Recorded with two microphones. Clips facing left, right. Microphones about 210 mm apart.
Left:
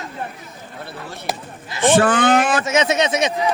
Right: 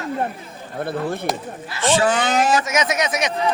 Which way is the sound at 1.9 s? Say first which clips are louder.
Left 4 dB; 55° left (ahead or behind).